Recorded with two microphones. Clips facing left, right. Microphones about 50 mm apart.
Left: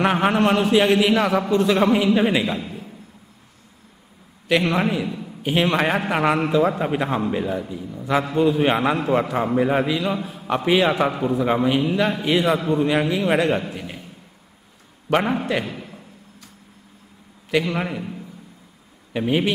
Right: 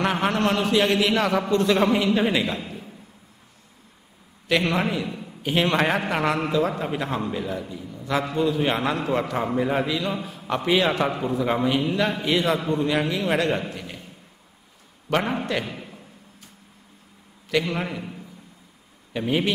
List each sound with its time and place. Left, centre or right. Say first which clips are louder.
0.0 s a man's voice: left 4 dB; centre
4.7 s a man's voice: left 3 dB; centre
15.0 s a man's voice: left 4 dB; centre
17.5 s a man's voice: left 3 dB; centre